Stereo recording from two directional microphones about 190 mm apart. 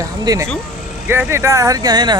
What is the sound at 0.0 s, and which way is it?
Speech, 15° right (ahead or behind).